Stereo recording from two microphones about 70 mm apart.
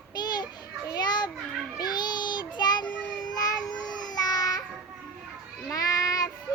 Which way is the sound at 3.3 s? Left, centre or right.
Left.